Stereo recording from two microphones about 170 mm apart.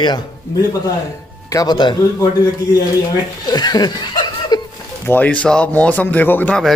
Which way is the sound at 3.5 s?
25° left (ahead or behind).